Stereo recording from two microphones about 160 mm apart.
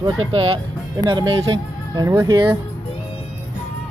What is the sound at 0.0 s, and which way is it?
Speech, 35° right (ahead or behind).